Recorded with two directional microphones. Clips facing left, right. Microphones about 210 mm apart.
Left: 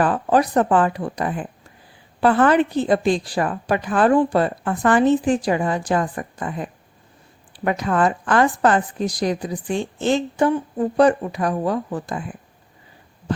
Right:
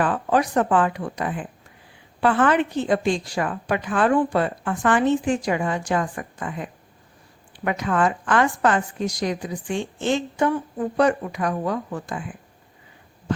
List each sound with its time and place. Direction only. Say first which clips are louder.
0.0 s a woman's voice: left 3 dB; 35° left (ahead or behind)